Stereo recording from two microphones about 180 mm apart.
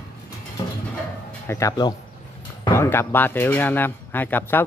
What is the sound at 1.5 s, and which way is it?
Speech, 15° left (ahead or behind).